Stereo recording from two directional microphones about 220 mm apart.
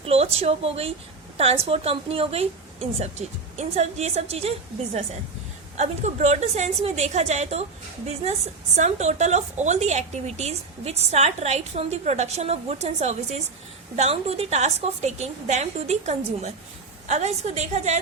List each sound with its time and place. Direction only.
0.0 s a woman's voice: 25° right (ahead or behind)
5.7 s a woman's voice: 30° right (ahead or behind)